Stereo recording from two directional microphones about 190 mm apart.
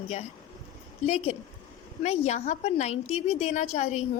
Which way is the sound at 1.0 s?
35° left (ahead or behind).